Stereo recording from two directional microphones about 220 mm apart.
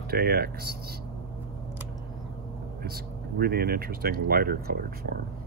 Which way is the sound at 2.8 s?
45° right (ahead or behind).